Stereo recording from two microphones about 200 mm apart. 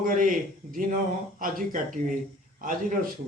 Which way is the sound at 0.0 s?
40° right (ahead or behind).